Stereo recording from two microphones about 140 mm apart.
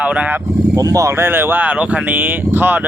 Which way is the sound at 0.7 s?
25° right (ahead or behind).